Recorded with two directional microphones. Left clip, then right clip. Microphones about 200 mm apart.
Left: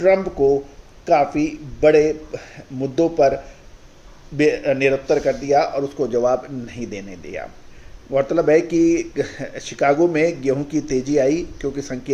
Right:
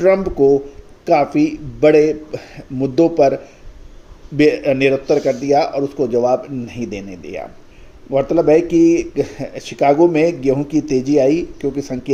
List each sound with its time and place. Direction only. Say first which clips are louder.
0.0 s speech: right 3 dB; 40° right (ahead or behind)